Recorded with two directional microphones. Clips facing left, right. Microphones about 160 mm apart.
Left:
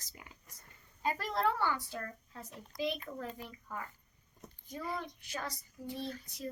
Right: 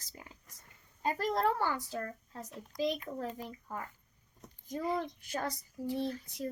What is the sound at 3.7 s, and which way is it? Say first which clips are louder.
Speech: right 1 dB; 35° right (ahead or behind).